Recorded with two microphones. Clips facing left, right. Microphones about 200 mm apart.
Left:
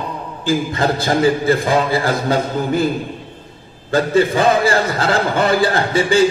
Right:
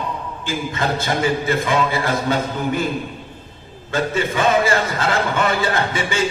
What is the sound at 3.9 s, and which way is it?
A man's voice, 35° left (ahead or behind).